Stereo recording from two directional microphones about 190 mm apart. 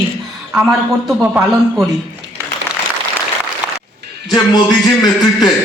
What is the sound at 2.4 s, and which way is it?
Applause, 15° right (ahead or behind).